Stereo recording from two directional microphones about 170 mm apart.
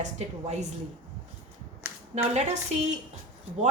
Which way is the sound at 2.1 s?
40° right (ahead or behind).